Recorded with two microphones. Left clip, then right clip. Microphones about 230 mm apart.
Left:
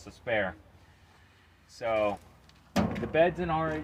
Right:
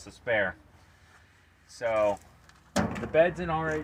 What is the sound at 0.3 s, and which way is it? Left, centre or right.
Speech, centre.